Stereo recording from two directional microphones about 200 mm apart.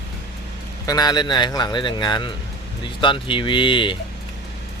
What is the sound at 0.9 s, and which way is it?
Speech, 20° left (ahead or behind).